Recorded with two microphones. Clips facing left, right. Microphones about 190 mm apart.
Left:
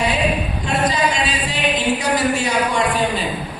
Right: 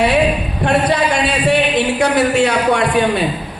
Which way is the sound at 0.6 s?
65° right (ahead or behind).